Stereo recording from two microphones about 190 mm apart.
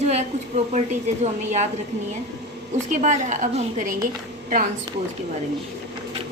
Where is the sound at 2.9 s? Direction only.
40° right (ahead or behind).